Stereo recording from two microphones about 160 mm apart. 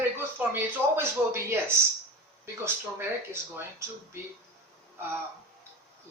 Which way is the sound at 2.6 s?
15° right (ahead or behind).